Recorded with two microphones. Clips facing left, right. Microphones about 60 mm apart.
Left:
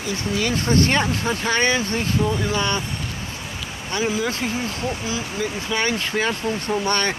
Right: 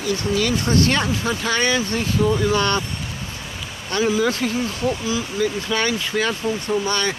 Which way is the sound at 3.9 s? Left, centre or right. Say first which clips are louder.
Right 4 dB; centre.